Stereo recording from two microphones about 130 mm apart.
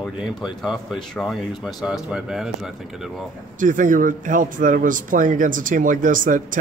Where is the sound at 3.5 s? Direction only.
90° right.